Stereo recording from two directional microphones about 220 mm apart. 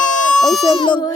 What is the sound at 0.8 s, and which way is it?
Speech, 20° left (ahead or behind).